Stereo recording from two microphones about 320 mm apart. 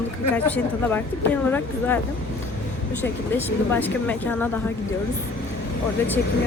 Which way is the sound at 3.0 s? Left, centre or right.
Centre.